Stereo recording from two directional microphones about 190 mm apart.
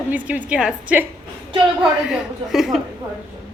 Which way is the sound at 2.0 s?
Centre (ahead or behind).